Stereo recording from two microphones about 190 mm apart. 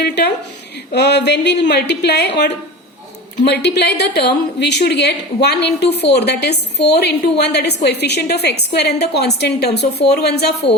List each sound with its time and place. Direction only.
0.0 s a woman's voice: 60° left (ahead or behind)